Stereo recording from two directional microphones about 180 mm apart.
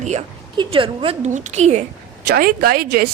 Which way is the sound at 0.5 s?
30° right (ahead or behind).